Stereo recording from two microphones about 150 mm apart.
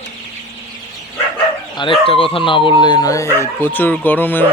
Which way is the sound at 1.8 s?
35° left (ahead or behind).